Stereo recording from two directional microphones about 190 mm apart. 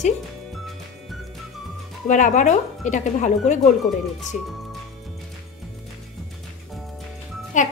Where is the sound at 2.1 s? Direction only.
40° left (ahead or behind).